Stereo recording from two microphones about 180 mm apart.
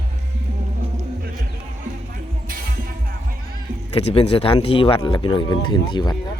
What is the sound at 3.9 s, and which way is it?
Speech, 30° left (ahead or behind).